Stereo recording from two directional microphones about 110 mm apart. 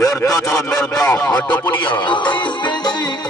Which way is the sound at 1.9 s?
45° left (ahead or behind).